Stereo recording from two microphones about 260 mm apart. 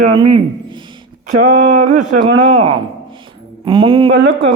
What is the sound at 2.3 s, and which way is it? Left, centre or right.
Speech, centre.